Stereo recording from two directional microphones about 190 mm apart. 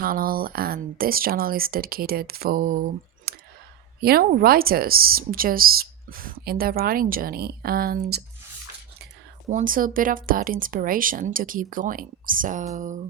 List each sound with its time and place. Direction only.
0.0 s speech: 50° right (ahead or behind)
3.3 s clicking: 55° right (ahead or behind)
4.0 s speech: 50° right (ahead or behind)
9.5 s speech: 45° right (ahead or behind)
12.7 s a sound: 40° right (ahead or behind)